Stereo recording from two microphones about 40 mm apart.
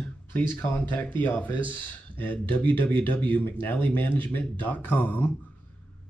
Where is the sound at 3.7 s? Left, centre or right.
Left.